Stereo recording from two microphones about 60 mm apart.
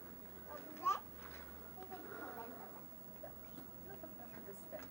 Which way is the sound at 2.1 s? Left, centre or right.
Centre.